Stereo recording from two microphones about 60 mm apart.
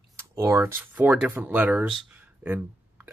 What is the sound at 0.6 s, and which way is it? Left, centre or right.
Speech, right.